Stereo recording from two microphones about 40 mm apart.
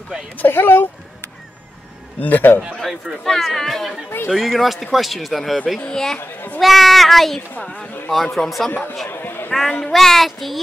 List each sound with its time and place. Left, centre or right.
0.5 s speech: left
2.1 s a child's voice: left
2.8 s speech: centre
5.9 s speech: centre
6.1 s a child's voice: left
6.6 s speech: centre
7.6 s speech: left
8.1 s speech: centre
9.0 s a sound: left
9.7 s speech: centre
9.9 s speech: centre